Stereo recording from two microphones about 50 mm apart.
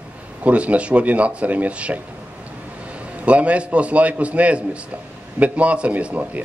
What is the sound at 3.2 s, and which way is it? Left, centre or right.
A man's voice, right.